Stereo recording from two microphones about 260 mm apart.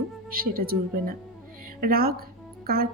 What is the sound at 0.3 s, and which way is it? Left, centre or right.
Speech, right.